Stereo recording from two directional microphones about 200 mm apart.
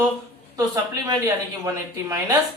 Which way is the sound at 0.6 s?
20° right (ahead or behind).